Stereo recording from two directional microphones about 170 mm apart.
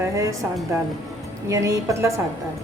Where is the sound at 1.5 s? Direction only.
20° right (ahead or behind).